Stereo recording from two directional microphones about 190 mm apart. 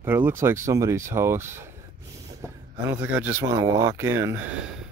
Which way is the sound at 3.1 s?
10° right (ahead or behind).